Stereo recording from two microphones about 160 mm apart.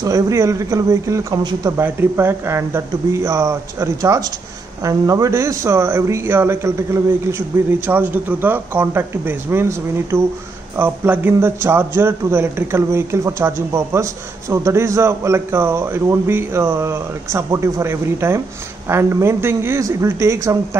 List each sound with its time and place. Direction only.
0.0 s a man's voice: 20° right (ahead or behind)